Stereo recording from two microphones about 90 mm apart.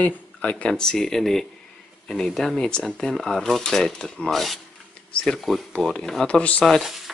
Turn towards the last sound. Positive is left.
turn(degrees=0)  # may be behind; listen again after turning